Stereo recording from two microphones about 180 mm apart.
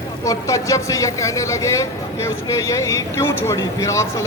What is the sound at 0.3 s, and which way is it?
Speech, 20° left (ahead or behind).